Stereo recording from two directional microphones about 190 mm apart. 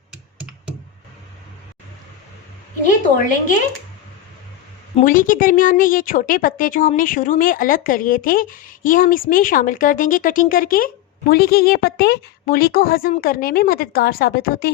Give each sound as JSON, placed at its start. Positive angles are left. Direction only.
{"t": 2.8, "sound": "a woman's voice", "side_deg": 45}
{"t": 5.0, "sound": "a woman's voice", "side_deg": 45}